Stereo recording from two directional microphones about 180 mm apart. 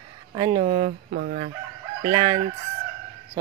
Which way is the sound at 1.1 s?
55° right (ahead or behind).